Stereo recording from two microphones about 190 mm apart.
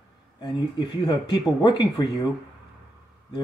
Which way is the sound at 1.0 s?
20° left (ahead or behind).